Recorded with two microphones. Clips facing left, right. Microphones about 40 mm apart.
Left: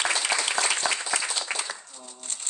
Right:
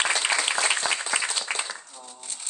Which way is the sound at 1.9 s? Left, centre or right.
Centre.